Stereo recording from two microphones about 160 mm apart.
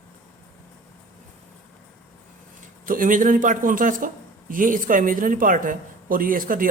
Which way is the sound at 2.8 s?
60° right (ahead or behind).